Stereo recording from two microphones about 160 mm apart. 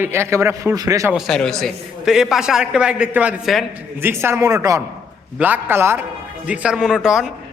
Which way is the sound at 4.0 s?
15° right (ahead or behind).